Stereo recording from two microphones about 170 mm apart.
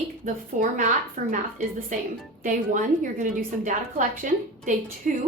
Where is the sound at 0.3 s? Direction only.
45° right (ahead or behind).